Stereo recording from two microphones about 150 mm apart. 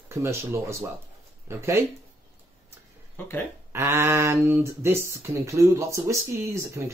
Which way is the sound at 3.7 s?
20° right (ahead or behind).